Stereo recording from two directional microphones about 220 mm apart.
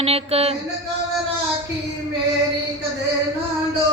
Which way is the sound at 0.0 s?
25° right (ahead or behind).